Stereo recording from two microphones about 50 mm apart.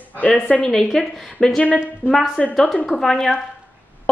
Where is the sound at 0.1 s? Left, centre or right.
Left.